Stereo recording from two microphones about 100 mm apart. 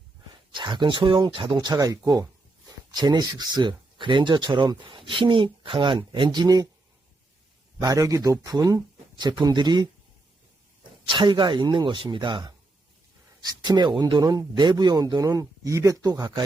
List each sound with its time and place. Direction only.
0.5 s speech: 50° right (ahead or behind)
1.5 s a man's voice: 40° right (ahead or behind)
7.8 s a man's voice: 35° right (ahead or behind)
11.1 s a man's voice: 50° right (ahead or behind)